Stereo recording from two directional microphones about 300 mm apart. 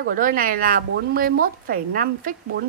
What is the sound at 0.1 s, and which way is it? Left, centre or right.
Speech, right.